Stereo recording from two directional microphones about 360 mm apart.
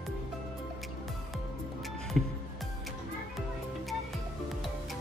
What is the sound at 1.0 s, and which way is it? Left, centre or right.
Music, centre.